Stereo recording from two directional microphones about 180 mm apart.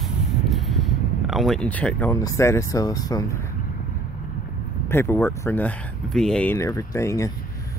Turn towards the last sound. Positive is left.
turn(degrees=15)  # may be behind; listen again after turning